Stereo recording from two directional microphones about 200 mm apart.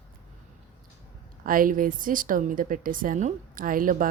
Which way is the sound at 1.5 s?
45° right (ahead or behind).